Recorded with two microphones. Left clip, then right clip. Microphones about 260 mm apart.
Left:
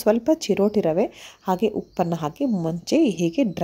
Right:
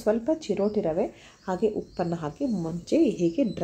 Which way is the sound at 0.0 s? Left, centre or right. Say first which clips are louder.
Left 6 dB; left.